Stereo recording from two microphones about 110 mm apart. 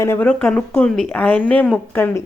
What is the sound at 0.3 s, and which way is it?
A woman's voice, 10° left (ahead or behind).